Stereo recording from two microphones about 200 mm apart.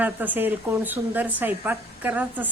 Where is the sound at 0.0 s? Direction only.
10° right (ahead or behind).